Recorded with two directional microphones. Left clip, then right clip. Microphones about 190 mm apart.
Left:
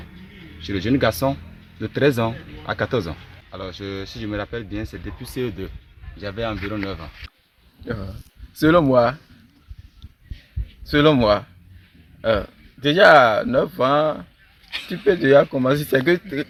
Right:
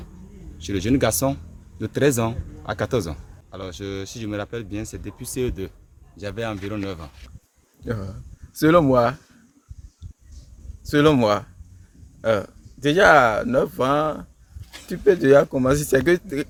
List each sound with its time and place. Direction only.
0.6 s a man's voice: 30° right (ahead or behind)
8.5 s a man's voice: 30° right (ahead or behind)
10.8 s a man's voice: 30° right (ahead or behind)